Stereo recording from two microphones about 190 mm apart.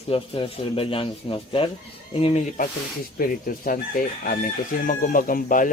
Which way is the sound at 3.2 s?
50° left (ahead or behind).